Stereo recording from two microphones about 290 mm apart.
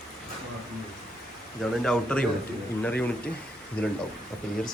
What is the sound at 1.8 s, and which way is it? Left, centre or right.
A man's voice, centre.